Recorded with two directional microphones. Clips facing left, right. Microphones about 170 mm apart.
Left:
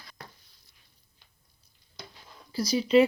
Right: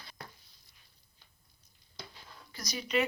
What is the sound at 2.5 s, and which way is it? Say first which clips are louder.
Speech: left 12 dB; 30° left (ahead or behind).